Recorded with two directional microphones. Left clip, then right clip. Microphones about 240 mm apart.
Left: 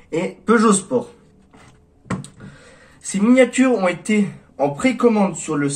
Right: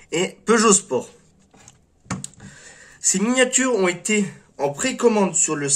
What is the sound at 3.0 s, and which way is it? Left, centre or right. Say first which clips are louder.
Speech: left 4 dB; right.